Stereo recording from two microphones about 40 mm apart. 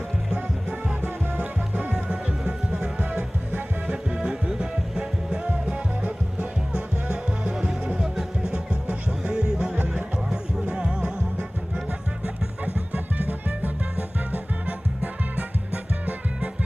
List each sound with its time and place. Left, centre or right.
0.3 s music: right
3.8 s music: right
7.5 s music: centre; by 16.5 s right